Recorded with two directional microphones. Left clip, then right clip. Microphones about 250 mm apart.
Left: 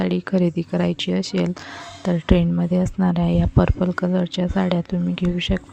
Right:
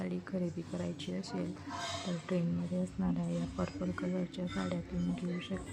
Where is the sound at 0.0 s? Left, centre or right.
Left.